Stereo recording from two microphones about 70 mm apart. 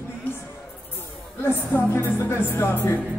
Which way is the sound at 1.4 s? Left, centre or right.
Left.